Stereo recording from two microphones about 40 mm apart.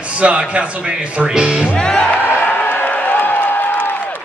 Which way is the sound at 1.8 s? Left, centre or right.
Left.